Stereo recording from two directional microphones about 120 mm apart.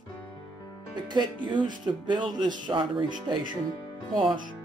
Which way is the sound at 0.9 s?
40° right (ahead or behind).